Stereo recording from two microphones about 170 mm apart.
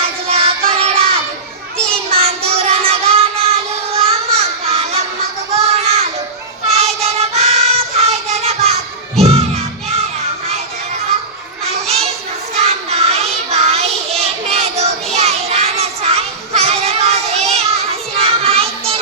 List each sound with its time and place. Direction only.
0.3 s child singing: 35° right (ahead or behind)
5.5 s a sound: 35° right (ahead or behind)
6.7 s child singing: 35° right (ahead or behind)
9.1 s music: 35° right (ahead or behind)
11.6 s children playing: 35° right (ahead or behind)
12.5 s child singing: 40° right (ahead or behind)
18.2 s music: 35° right (ahead or behind)